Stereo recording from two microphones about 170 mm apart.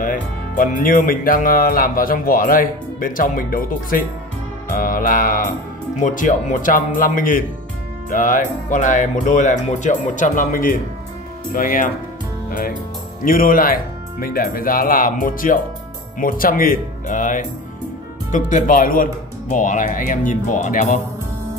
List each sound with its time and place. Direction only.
0.0 s speech: 50° left (ahead or behind)
12.4 s music: 55° left (ahead or behind)
13.2 s speech: 55° left (ahead or behind)